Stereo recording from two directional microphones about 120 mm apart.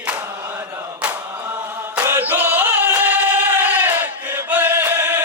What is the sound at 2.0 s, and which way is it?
Music, 15° right (ahead or behind).